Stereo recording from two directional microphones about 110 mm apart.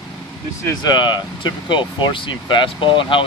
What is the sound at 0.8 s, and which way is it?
Speech, 40° left (ahead or behind).